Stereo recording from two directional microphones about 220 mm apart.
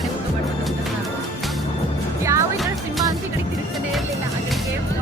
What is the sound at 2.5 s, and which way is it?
Music, centre (ahead or behind).